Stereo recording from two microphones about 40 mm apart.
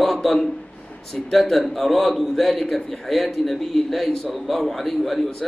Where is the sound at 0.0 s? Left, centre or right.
Centre.